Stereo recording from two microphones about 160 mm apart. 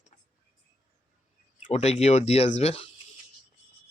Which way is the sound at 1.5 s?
45° left (ahead or behind).